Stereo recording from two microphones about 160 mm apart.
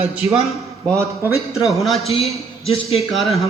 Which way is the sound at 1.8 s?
Centre (ahead or behind).